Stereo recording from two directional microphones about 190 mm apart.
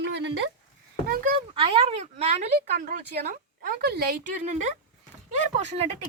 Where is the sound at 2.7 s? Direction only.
50° right (ahead or behind).